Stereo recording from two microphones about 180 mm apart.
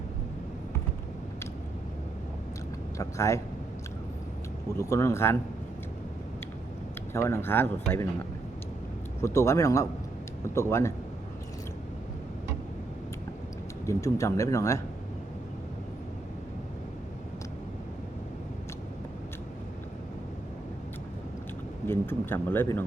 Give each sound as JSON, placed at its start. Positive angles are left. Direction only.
{"t": 3.0, "sound": "speech", "side_deg": 15}
{"t": 4.8, "sound": "speech", "side_deg": 15}
{"t": 7.1, "sound": "speech", "side_deg": 15}
{"t": 9.2, "sound": "speech", "side_deg": 15}
{"t": 13.8, "sound": "speech", "side_deg": 15}
{"t": 21.8, "sound": "speech", "side_deg": 10}